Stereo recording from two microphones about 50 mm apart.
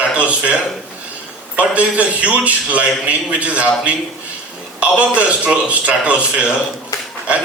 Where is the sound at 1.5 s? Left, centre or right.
Right.